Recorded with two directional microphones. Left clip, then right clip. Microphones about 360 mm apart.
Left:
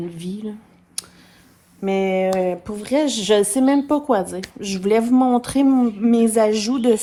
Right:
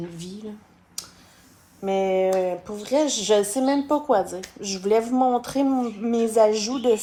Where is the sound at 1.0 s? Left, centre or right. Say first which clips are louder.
Left 3 dB; left.